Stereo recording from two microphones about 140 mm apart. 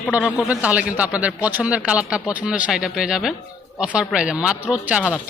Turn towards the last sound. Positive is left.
turn(degrees=-5)  # may be behind; listen again after turning